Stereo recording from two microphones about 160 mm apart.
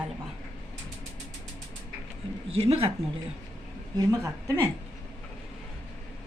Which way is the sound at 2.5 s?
35° right (ahead or behind).